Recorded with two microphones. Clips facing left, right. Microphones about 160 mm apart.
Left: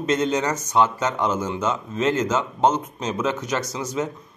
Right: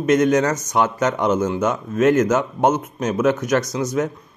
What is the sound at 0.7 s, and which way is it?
Speech, 15° right (ahead or behind).